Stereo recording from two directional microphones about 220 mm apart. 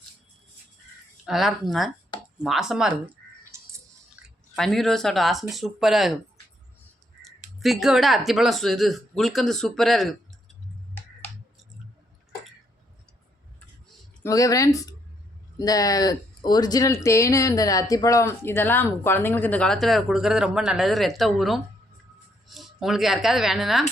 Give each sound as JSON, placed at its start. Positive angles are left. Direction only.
{"t": 1.2, "sound": "speech", "side_deg": 0}
{"t": 3.5, "sound": "a sound", "side_deg": -10}
{"t": 4.5, "sound": "speech", "side_deg": 0}
{"t": 7.2, "sound": "speech", "side_deg": 0}
{"t": 14.3, "sound": "speech", "side_deg": 15}